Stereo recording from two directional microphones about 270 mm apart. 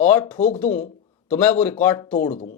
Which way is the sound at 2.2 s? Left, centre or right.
Left.